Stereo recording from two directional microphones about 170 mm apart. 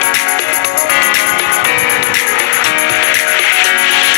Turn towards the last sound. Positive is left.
turn(degrees=90)